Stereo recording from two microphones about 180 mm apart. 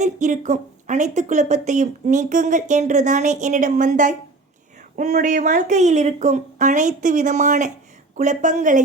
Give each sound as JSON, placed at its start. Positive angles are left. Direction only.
{"t": 0.0, "sound": "speech", "side_deg": -40}